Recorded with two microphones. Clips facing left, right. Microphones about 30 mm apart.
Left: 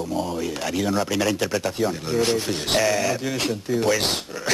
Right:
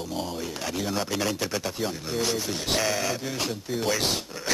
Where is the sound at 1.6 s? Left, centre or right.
Centre.